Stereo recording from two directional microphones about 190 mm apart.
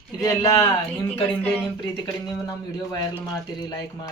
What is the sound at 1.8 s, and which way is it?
Speech, 20° left (ahead or behind).